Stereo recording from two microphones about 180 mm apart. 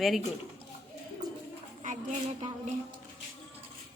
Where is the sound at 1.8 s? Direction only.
45° right (ahead or behind).